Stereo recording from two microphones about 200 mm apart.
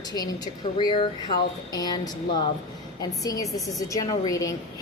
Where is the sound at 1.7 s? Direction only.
20° left (ahead or behind).